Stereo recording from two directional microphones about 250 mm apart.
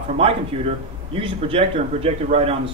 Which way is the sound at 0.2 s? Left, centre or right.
Right.